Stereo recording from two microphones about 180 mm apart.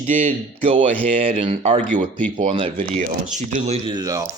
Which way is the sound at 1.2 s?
30° right (ahead or behind).